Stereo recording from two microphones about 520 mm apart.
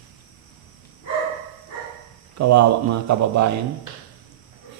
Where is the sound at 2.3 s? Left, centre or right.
Right.